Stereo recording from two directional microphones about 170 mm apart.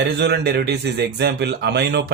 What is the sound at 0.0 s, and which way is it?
Speech, 75° right (ahead or behind).